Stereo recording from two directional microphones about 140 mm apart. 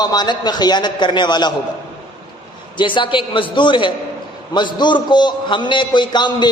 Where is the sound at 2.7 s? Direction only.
35° left (ahead or behind).